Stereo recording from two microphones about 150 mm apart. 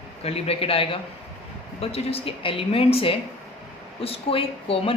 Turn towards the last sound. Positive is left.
turn(degrees=40)  # may be behind; listen again after turning